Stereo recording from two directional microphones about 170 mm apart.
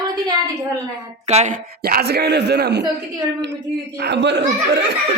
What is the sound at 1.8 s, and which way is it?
A man's voice, 70° right (ahead or behind).